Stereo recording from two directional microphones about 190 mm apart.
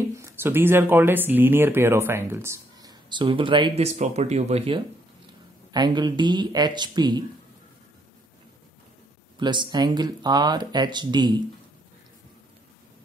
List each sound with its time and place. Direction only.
0.1 s speech: 15° right (ahead or behind)
9.4 s speech: 25° right (ahead or behind)